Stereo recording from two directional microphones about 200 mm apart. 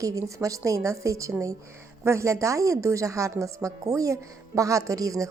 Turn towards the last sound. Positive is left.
turn(degrees=-15)  # may be behind; listen again after turning